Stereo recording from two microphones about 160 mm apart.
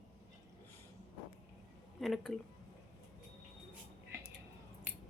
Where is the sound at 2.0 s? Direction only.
Centre (ahead or behind).